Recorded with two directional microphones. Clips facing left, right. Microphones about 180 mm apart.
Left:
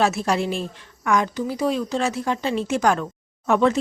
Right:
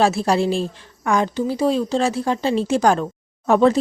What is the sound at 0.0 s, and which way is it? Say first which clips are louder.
A woman's voice: right 4 dB; 30° right (ahead or behind).